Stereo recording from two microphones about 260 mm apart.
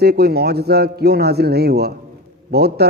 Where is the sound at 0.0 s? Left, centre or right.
Right.